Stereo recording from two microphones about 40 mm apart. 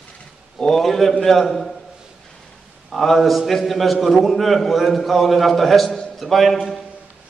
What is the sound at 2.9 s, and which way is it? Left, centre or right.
A man's voice, centre.